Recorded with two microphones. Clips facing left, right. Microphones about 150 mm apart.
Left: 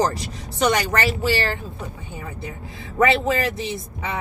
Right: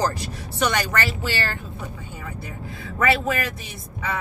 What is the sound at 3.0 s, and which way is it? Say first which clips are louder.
Speech: left 3 dB; 25° left (ahead or behind).